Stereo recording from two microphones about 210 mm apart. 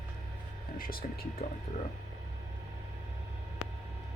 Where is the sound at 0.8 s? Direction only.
45° left (ahead or behind).